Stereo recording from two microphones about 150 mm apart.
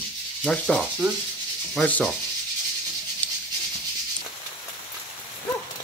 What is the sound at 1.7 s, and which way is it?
Rub, 5° left (ahead or behind).